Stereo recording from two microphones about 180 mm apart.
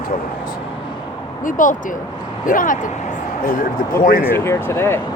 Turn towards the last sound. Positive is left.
turn(degrees=15)  # may be behind; listen again after turning